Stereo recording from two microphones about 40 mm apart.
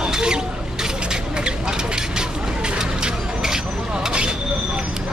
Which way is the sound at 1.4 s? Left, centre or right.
Centre.